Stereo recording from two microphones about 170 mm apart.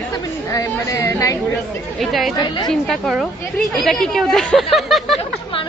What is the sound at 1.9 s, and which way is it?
Speech, centre (ahead or behind).